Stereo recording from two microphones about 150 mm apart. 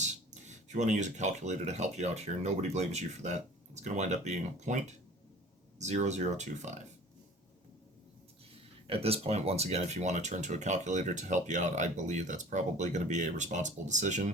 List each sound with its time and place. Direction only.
0.0 s speech: 50° right (ahead or behind)
8.9 s speech: 40° right (ahead or behind)